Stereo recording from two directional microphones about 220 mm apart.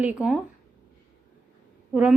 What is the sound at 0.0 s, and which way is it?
Speech, 5° right (ahead or behind).